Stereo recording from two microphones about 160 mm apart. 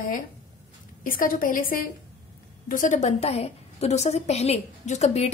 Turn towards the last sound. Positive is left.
turn(degrees=45)  # may be behind; listen again after turning